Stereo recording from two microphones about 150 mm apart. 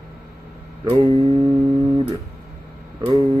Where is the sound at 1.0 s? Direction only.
35° right (ahead or behind).